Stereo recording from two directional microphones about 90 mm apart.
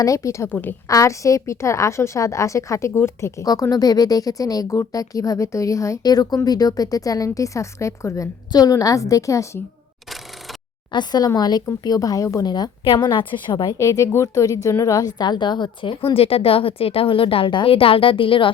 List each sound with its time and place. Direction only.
0.0 s a woman's voice: 35° left (ahead or behind)
0.5 s a woman's voice: 20° left (ahead or behind)
0.9 s a woman's voice: 35° left (ahead or behind)
3.4 s a woman's voice: 45° left (ahead or behind)
6.0 s a woman's voice: 45° left (ahead or behind)
10.9 s a woman's voice: 50° left (ahead or behind)
12.8 s a woman's voice: 65° left (ahead or behind)
13.7 s a woman's voice: 35° left (ahead or behind); by 18.5 s 70° left (ahead or behind)